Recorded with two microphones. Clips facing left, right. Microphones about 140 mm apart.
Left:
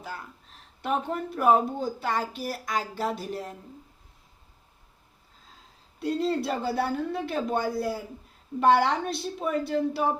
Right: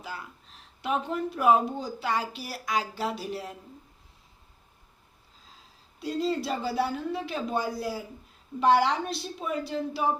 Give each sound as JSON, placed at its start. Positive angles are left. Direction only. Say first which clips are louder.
{"t": 0.8, "sound": "speech", "louder": "even", "side_deg": 50}
{"t": 6.0, "sound": "a woman's voice", "louder": "left 2 dB", "side_deg": 60}